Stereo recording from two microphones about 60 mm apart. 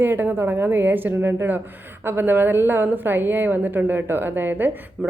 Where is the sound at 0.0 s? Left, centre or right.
Right.